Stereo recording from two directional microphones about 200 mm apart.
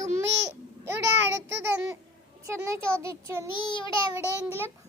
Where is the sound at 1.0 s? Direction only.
60° right (ahead or behind).